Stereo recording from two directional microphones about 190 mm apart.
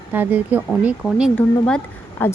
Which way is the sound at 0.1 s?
10° right (ahead or behind).